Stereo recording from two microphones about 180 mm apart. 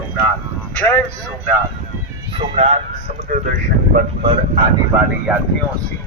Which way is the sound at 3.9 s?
40° right (ahead or behind).